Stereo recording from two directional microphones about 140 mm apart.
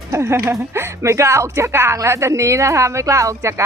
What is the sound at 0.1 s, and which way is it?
Speech, 20° right (ahead or behind).